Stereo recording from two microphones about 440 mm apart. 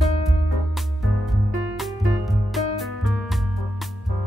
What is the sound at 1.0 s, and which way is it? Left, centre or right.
Music, centre.